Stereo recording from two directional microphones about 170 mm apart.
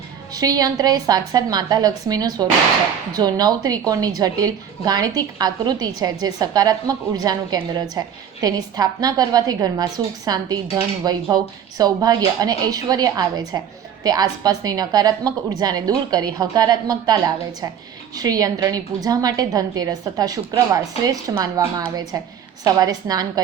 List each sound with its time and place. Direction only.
0.3 s a woman's voice: 20° right (ahead or behind)